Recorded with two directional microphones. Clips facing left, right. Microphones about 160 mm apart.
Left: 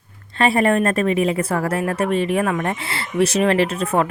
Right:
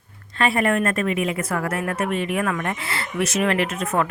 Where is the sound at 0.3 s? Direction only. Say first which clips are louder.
Left 4 dB; 30° left (ahead or behind).